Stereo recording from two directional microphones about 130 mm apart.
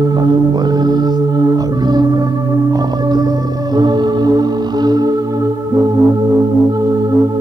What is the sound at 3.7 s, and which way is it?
Music, 30° right (ahead or behind).